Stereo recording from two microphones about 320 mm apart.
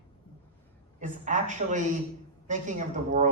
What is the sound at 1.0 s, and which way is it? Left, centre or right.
A man's voice, right.